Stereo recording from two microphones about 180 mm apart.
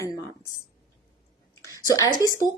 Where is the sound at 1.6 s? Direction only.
20° left (ahead or behind).